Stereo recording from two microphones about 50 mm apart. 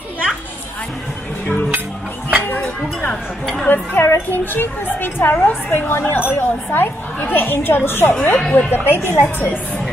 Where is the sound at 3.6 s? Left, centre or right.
Left.